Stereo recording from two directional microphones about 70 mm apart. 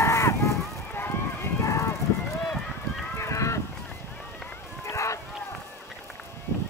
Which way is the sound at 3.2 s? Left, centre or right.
Left.